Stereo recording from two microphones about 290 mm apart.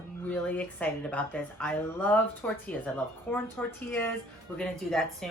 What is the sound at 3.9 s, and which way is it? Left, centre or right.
A woman's voice, centre.